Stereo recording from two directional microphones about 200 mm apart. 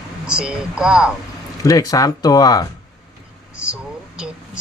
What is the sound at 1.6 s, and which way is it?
Speech, 15° left (ahead or behind).